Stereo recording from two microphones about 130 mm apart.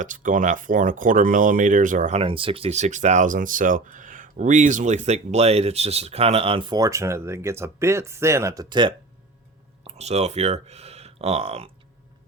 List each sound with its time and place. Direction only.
0.0 s speech: 85° right
2.1 s speech: 45° right (ahead or behind)
6.7 s speech: 25° right (ahead or behind)
8.7 s speech: 35° right (ahead or behind)
9.8 s speech: 55° right (ahead or behind)